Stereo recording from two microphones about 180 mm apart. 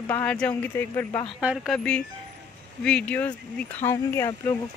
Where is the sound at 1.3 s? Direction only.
5° right (ahead or behind).